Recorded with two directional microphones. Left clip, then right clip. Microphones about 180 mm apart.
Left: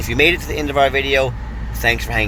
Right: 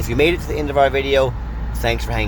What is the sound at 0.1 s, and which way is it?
Speech, 10° right (ahead or behind).